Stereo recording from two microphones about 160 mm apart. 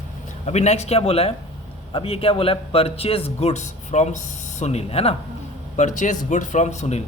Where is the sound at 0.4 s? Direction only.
45° left (ahead or behind).